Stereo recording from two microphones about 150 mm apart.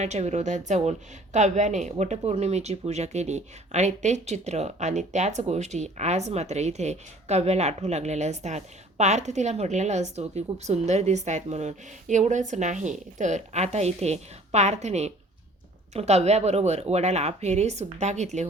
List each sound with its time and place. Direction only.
0.0 s speech: 50° right (ahead or behind)